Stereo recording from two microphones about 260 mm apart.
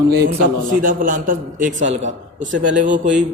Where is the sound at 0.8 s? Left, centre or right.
Right.